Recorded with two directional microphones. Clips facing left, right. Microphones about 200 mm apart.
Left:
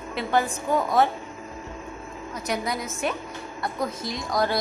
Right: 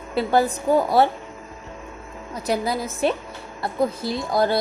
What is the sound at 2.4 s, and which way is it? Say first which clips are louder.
A woman's voice: right 5 dB; 30° right (ahead or behind).